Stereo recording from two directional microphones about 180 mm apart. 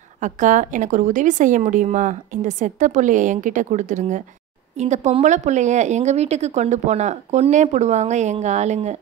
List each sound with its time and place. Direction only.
0.2 s a woman's voice: 45° right (ahead or behind)